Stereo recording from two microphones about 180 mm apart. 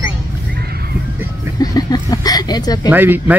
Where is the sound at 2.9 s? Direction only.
10° right (ahead or behind).